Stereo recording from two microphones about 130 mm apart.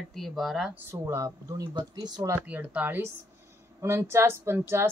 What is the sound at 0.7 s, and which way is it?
Speech, 20° right (ahead or behind).